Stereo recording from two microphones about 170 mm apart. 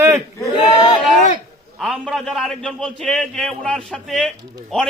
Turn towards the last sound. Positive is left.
turn(degrees=0)  # may be behind; listen again after turning